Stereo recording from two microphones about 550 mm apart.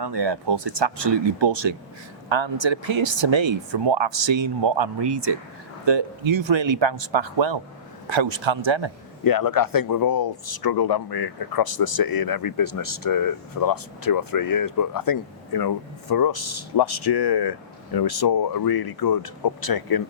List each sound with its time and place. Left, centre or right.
0.0 s speech: right
9.2 s speech: left